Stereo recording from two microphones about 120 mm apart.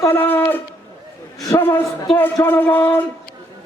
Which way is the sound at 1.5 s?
20° left (ahead or behind).